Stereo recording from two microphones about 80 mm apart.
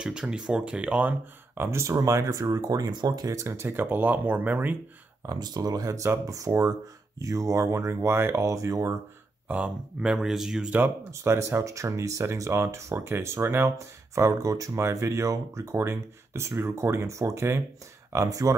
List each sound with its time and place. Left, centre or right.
0.0 s speech: centre; by 3.3 s right
3.3 s speech: right
5.2 s speech: right
9.5 s speech: centre
11.1 s speech: right
18.1 s speech: right